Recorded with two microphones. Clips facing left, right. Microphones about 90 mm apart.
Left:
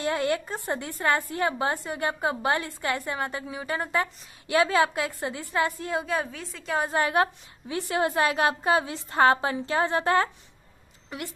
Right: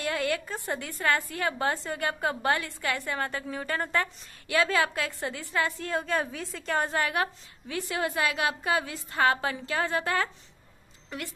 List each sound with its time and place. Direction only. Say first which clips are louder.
0.0 s a woman's voice: left 3 dB; 20° left (ahead or behind); by 6.9 s 5° left (ahead or behind)
6.9 s a woman's voice: left 4 dB; 25° left (ahead or behind)